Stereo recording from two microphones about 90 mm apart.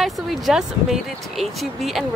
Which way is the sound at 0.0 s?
5° right (ahead or behind).